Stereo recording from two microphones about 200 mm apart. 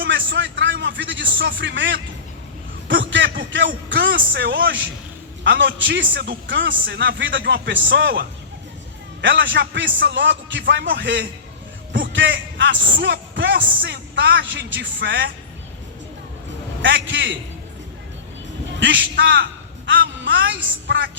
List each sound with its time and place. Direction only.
0.0 s a man's voice: 65° right (ahead or behind)
3.1 s a man's voice: 65° right (ahead or behind)
16.8 s a man's voice: 65° right (ahead or behind)
18.8 s a man's voice: 65° right (ahead or behind)